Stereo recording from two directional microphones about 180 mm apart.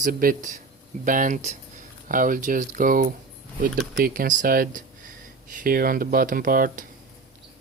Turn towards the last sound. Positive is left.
turn(degrees=-50)  # may be behind; listen again after turning